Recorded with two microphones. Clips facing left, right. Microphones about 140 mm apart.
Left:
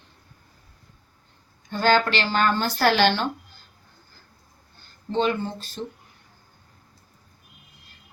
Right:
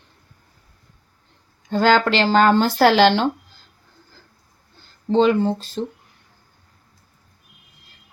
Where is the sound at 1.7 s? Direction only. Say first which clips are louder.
Right 4 dB; 90° right.